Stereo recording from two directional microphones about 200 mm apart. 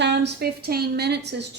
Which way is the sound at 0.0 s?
60° right (ahead or behind).